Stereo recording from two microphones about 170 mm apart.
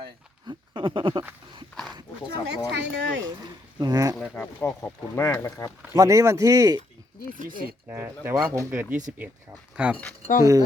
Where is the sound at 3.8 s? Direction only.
20° right (ahead or behind).